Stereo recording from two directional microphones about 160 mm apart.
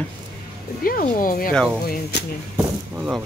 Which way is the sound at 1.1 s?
65° left (ahead or behind).